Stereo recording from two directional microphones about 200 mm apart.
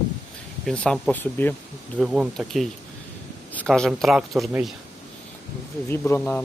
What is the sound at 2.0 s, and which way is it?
Speech, centre (ahead or behind).